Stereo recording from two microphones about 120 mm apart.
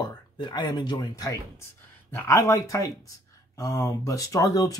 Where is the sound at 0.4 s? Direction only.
40° left (ahead or behind).